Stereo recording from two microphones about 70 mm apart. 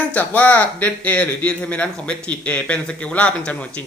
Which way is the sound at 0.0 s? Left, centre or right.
Left.